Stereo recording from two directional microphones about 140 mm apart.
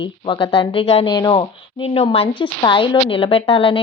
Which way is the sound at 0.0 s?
35° left (ahead or behind).